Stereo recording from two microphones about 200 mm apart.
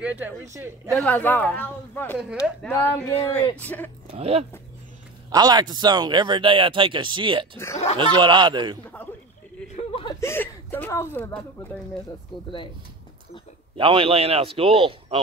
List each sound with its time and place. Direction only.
0.0 s speech: 10° right (ahead or behind)
0.9 s speech: 10° left (ahead or behind)
4.1 s speech: 30° right (ahead or behind)
5.3 s speech: 20° right (ahead or behind)
7.5 s speech: 15° left (ahead or behind)
8.0 s speech: 25° right (ahead or behind)
9.8 s whimper: 25° left (ahead or behind)
10.2 s speech: 10° left (ahead or behind)
13.7 s speech: 25° right (ahead or behind)